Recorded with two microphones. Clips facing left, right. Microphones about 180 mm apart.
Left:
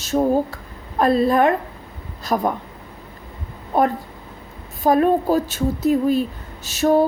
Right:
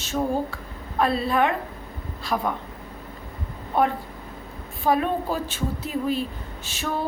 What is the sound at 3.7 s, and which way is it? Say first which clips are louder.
Speech: left 4 dB; 40° left (ahead or behind).